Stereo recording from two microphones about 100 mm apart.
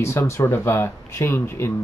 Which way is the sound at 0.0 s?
30° left (ahead or behind).